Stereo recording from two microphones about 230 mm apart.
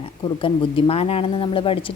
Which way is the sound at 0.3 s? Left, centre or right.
Left.